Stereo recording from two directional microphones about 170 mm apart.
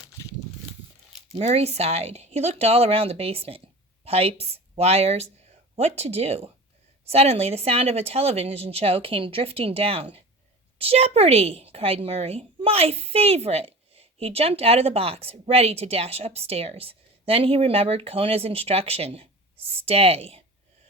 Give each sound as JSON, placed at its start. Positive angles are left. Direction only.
{"t": 1.4, "sound": "a woman's voice", "side_deg": -40}